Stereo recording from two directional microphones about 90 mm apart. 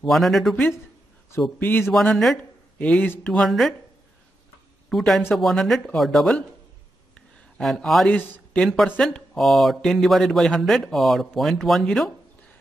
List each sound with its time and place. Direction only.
0.0 s speech: centre (ahead or behind)
1.6 s speech: 20° left (ahead or behind)
1.9 s speech: centre (ahead or behind)
2.8 s speech: 15° left (ahead or behind)
3.3 s speech: centre (ahead or behind)
4.8 s speech: centre (ahead or behind)
7.5 s speech: 5° left (ahead or behind)